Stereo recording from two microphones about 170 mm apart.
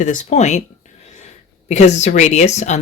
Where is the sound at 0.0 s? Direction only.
45° left (ahead or behind).